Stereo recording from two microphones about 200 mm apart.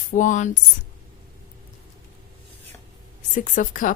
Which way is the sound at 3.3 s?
40° left (ahead or behind).